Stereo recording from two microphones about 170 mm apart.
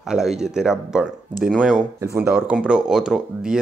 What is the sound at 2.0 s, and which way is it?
Speech, 15° right (ahead or behind).